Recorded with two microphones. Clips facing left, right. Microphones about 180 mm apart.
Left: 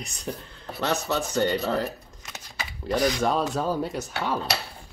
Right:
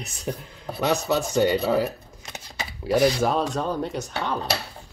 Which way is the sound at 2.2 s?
30° right (ahead or behind).